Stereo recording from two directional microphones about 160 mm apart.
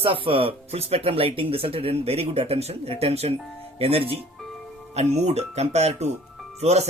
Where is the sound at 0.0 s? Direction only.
35° right (ahead or behind).